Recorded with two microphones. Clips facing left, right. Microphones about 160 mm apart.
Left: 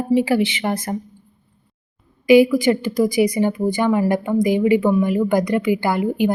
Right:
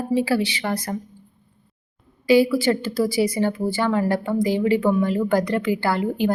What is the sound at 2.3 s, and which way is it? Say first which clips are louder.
A woman's voice: left 4 dB; 15° left (ahead or behind).